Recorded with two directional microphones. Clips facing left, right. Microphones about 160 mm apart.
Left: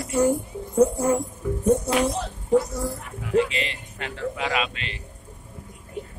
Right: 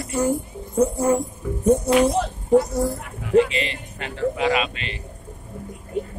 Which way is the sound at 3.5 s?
Centre (ahead or behind).